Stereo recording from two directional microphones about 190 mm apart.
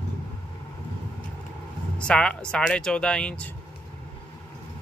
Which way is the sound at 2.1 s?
5° left (ahead or behind).